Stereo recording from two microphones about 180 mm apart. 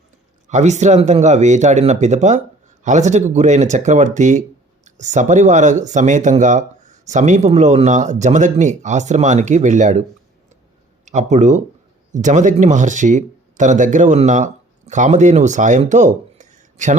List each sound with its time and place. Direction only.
0.4 s speech: 40° right (ahead or behind)
11.0 s speech: 40° right (ahead or behind)